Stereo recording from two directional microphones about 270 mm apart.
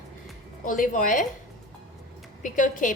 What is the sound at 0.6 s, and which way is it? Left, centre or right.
Speech, left.